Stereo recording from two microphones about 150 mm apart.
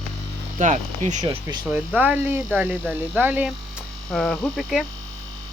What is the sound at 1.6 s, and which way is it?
Speech, 10° right (ahead or behind).